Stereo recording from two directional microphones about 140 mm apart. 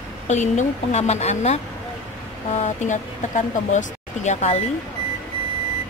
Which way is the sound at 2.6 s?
55° left (ahead or behind).